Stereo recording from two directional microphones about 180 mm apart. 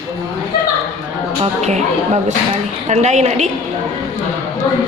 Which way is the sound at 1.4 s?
40° right (ahead or behind).